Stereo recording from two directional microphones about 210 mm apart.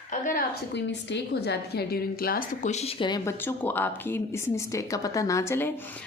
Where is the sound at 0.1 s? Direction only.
40° left (ahead or behind).